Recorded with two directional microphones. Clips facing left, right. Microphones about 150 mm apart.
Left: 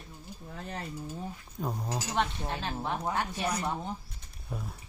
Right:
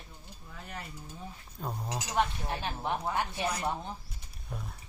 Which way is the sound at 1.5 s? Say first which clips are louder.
Left 3 dB; 10° left (ahead or behind).